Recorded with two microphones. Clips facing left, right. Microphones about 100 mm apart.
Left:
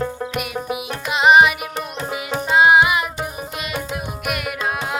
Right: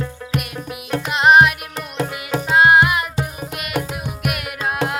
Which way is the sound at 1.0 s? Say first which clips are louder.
Even; centre (ahead or behind).